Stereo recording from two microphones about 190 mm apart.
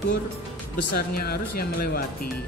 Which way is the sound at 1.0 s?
55° left (ahead or behind).